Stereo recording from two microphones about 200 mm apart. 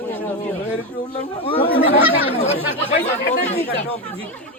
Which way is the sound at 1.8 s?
10° right (ahead or behind).